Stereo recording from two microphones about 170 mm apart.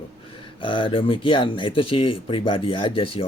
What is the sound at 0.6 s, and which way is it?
Speech, 30° left (ahead or behind).